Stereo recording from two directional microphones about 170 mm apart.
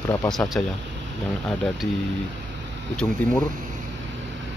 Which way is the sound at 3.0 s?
20° left (ahead or behind).